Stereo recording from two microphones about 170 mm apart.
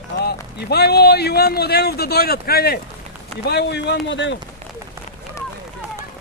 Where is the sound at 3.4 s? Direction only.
75° left (ahead or behind).